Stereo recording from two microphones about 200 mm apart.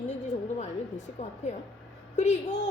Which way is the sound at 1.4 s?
35° left (ahead or behind).